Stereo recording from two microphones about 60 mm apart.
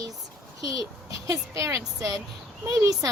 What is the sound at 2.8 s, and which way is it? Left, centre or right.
Speech, right.